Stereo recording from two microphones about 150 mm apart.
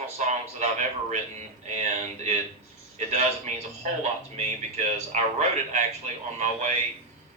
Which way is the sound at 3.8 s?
50° right (ahead or behind).